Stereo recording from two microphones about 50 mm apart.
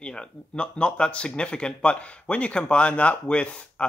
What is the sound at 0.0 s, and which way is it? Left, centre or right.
Speech, centre.